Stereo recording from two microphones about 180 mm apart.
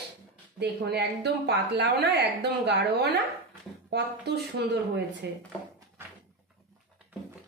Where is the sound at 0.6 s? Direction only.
70° right (ahead or behind).